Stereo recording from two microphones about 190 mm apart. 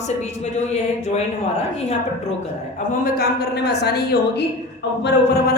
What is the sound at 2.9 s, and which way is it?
A man's voice, 50° left (ahead or behind).